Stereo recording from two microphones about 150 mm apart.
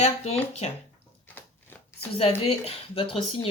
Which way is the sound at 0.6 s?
45° left (ahead or behind).